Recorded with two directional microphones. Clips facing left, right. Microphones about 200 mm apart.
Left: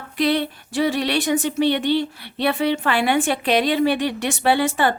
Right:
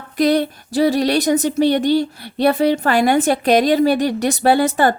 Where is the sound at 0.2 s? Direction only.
40° right (ahead or behind).